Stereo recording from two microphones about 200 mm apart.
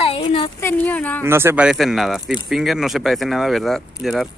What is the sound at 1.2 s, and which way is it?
Speech, 10° right (ahead or behind).